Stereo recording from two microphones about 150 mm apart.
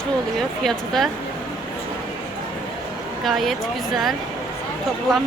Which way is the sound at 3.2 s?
Centre (ahead or behind).